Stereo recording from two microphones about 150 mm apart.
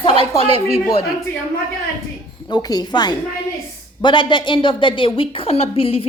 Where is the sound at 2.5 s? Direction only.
25° left (ahead or behind).